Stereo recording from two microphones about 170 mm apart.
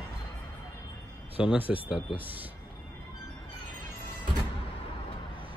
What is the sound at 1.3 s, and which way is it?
Speech, 5° right (ahead or behind).